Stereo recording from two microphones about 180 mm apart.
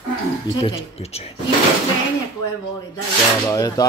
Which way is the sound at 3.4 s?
20° left (ahead or behind).